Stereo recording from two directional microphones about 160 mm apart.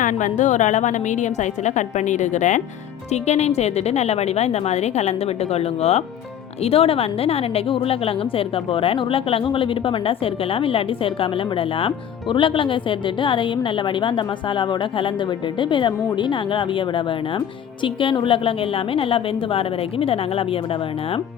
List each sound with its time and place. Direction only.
0.0 s a woman's voice: 50° left (ahead or behind); by 11.3 s 35° left (ahead or behind)
12.3 s a woman's voice: 30° left (ahead or behind)
16.1 s a woman's voice: 30° left (ahead or behind)
17.8 s a woman's voice: 30° left (ahead or behind)